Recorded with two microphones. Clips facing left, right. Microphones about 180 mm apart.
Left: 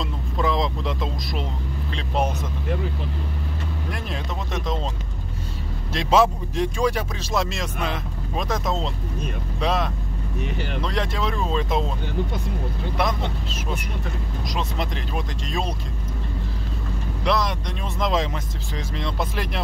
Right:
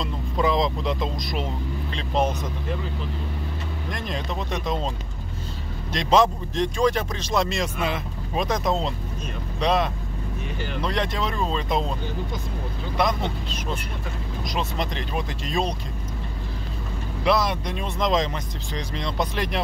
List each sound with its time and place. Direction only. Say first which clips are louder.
0.0 s vehicle: right 1 dB; centre (ahead or behind)
2.0 s speech: right 1 dB; 10° left (ahead or behind)
3.9 s speech: right 4 dB; 5° left (ahead or behind)
5.9 s speech: left 1 dB; 5° left (ahead or behind)
10.4 s speech: left 3 dB; 65° left (ahead or behind)
10.8 s speech: right 1 dB; centre (ahead or behind)
12.9 s speech: right 2 dB; centre (ahead or behind)
17.2 s speech: right 2 dB; 5° right (ahead or behind)